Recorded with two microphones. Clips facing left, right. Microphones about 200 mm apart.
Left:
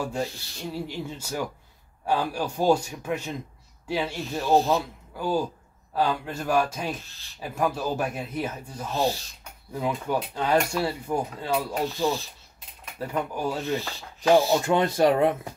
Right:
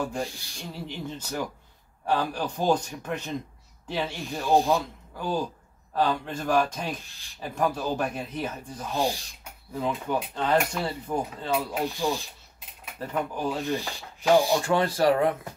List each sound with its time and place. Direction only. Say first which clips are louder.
0.0 s speech: left 1 dB; 5° left (ahead or behind)
4.3 s rub: left 1 dB; 15° right (ahead or behind)
4.7 s speech: left 1 dB; 5° left (ahead or behind)
8.9 s rub: left 2 dB; 15° right (ahead or behind)
9.8 s speech: left 1 dB; 10° left (ahead or behind)
11.7 s rub: left 2 dB; 15° right (ahead or behind)
13.0 s speech: left 1 dB; 10° left (ahead or behind)
13.6 s rub: left 1 dB; 15° right (ahead or behind)
14.7 s speech: left 2 dB; 20° left (ahead or behind)